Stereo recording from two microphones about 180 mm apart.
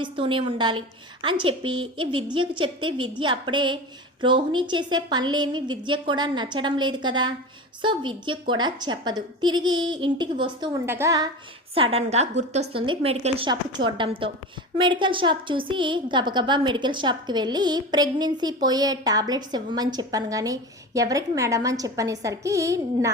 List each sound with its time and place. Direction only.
0.0 s a woman's voice: 30° right (ahead or behind)
10.8 s a woman's voice: 15° right (ahead or behind)
11.7 s a woman's voice: 30° right (ahead or behind); by 23.1 s 15° right (ahead or behind)